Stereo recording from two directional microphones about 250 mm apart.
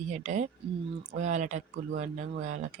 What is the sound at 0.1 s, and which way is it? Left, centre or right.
Speech, right.